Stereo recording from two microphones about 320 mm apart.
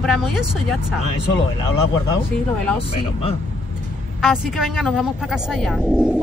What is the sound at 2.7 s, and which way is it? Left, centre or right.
Speech, centre.